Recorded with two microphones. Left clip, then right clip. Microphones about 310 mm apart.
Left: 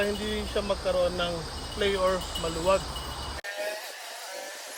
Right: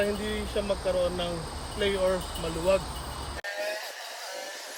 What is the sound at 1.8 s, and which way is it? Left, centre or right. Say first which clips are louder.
Speech: left 1 dB; centre.